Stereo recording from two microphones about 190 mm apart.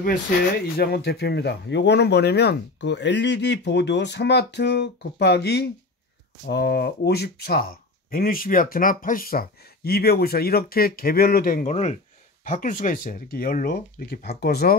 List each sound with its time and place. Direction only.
0.7 s speech: 55° left (ahead or behind)